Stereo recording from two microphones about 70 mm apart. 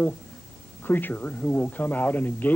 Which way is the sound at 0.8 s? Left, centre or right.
Left.